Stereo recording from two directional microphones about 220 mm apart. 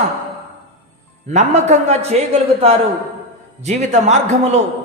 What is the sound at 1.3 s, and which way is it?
A man's voice, 30° right (ahead or behind).